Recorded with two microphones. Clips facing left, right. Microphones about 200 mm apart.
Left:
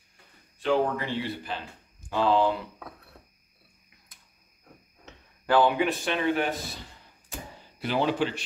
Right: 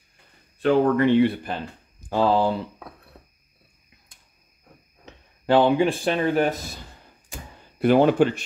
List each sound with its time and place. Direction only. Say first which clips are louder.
0.6 s speech: right 7 dB; 60° right (ahead or behind)
2.0 s speech: right 3 dB; 40° right (ahead or behind)
5.5 s speech: right 5 dB; 25° right (ahead or behind); by 6.5 s 40° right (ahead or behind)
7.8 s speech: right 9 dB; 50° right (ahead or behind)